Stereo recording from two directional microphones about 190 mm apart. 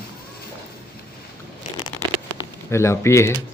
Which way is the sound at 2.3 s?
15° left (ahead or behind).